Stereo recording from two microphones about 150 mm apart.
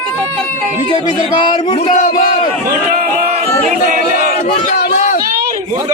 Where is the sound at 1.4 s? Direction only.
35° left (ahead or behind).